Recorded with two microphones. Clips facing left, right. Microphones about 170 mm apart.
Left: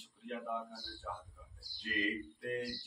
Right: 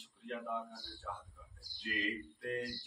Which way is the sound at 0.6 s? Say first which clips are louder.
Even; centre (ahead or behind).